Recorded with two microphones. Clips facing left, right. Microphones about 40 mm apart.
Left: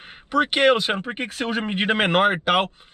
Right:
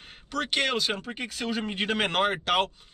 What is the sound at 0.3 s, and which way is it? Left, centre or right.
Speech, left.